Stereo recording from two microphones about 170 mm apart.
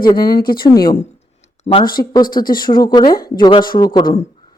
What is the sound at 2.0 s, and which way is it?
Speech, 25° left (ahead or behind).